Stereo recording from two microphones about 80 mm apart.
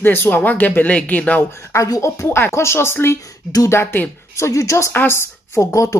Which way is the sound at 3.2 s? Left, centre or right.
Left.